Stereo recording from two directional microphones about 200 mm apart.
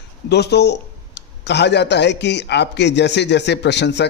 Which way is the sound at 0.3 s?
55° left (ahead or behind).